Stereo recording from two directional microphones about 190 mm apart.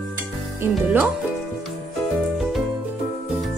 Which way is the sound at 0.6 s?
10° right (ahead or behind).